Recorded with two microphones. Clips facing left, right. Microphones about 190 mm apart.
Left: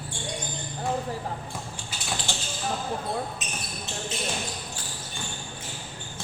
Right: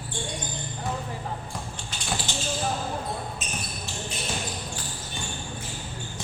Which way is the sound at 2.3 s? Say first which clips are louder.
Right 1 dB; 20° right (ahead or behind).